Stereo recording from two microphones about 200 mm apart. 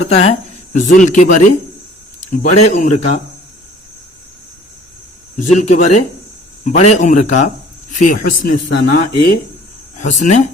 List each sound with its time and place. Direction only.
0.0 s speech: 30° left (ahead or behind)
5.4 s speech: 35° left (ahead or behind)